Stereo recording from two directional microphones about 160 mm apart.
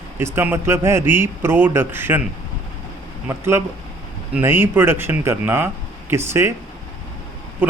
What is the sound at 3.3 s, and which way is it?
Speech, 15° right (ahead or behind).